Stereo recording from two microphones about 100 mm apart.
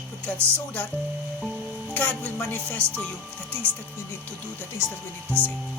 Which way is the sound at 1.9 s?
15° left (ahead or behind).